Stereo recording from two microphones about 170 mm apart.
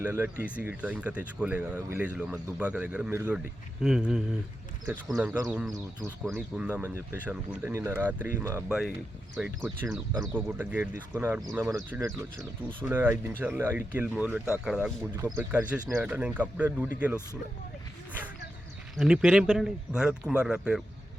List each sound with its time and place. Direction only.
0.0 s speech: 10° right (ahead or behind)
6.1 s speech: centre (ahead or behind)
18.9 s speech: 5° right (ahead or behind)